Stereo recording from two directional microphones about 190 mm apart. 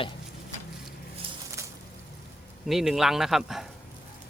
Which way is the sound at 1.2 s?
30° right (ahead or behind).